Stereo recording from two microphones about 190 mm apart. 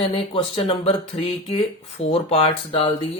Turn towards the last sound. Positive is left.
turn(degrees=25)  # may be behind; listen again after turning